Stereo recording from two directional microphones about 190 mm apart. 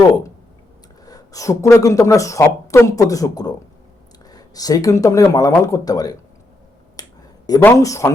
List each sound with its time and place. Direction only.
1.0 s speech: 20° left (ahead or behind)
7.0 s finger snapping: 20° left (ahead or behind)
7.6 s speech: 15° left (ahead or behind)